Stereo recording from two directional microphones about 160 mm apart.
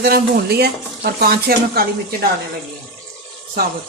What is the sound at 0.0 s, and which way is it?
Speech, 85° right.